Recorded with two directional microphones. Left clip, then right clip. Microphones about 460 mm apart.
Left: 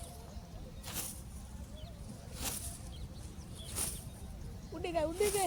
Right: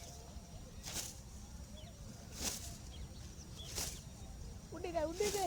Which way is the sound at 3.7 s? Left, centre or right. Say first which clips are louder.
Left 1 dB; right.